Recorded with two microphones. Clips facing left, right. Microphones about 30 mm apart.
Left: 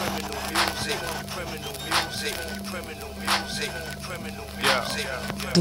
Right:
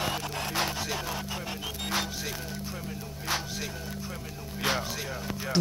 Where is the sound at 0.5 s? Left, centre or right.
Left.